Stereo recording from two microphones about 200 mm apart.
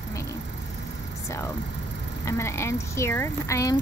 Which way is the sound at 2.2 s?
15° left (ahead or behind).